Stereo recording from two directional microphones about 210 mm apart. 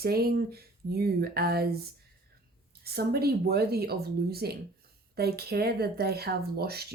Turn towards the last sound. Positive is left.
turn(degrees=-50)  # may be behind; listen again after turning